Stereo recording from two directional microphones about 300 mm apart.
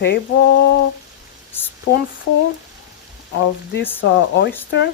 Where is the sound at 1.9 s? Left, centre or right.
Left.